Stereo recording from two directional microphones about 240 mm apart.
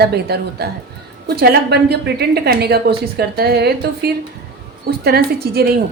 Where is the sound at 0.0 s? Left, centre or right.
Right.